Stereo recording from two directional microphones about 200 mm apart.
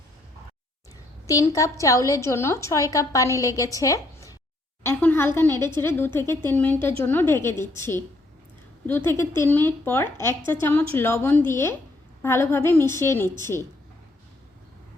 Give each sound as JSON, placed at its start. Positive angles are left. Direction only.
{"t": 1.3, "sound": "a woman's voice", "side_deg": 15}